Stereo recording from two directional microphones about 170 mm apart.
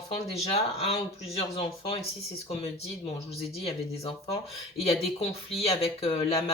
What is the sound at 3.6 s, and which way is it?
Speech, 35° left (ahead or behind).